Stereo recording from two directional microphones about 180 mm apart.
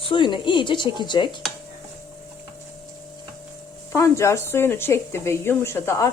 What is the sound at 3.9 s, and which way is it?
Speech, 15° left (ahead or behind).